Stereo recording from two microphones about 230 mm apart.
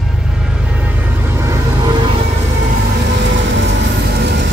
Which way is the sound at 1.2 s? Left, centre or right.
Centre.